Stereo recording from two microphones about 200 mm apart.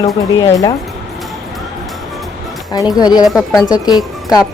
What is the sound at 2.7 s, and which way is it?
Speech, 20° left (ahead or behind).